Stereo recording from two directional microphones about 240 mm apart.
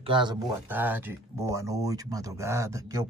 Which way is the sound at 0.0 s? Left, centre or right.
Centre.